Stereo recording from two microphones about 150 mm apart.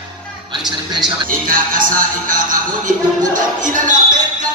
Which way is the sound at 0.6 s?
30° right (ahead or behind).